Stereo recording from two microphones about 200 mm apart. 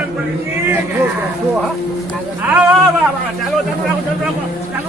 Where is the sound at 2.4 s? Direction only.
10° right (ahead or behind).